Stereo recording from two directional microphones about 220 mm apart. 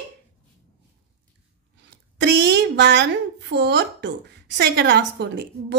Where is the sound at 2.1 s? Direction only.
50° right (ahead or behind).